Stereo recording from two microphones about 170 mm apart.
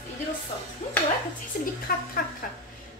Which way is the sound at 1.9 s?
60° left (ahead or behind).